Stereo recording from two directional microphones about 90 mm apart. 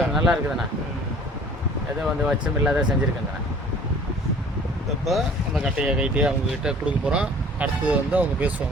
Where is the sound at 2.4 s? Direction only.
10° right (ahead or behind).